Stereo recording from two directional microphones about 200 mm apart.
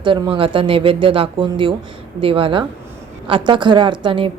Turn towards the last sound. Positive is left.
turn(degrees=-25)  # may be behind; listen again after turning